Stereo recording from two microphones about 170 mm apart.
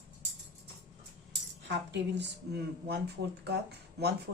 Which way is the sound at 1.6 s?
90° right.